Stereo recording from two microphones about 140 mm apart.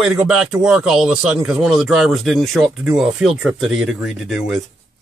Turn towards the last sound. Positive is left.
turn(degrees=0)  # may be behind; listen again after turning